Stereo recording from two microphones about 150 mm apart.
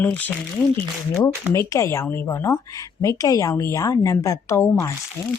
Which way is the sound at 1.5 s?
20° left (ahead or behind).